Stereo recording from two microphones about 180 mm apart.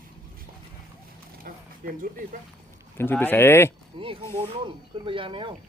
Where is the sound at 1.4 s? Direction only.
50° right (ahead or behind).